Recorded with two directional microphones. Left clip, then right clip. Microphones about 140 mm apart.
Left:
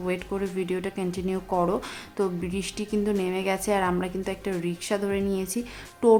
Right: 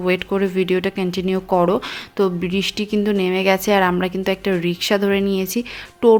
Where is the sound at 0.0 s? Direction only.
40° right (ahead or behind).